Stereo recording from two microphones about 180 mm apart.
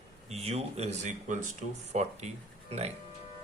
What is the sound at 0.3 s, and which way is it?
Speech, 35° right (ahead or behind).